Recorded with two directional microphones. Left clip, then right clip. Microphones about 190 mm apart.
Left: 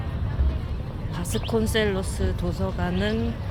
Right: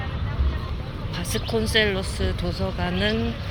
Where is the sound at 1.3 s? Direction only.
20° left (ahead or behind).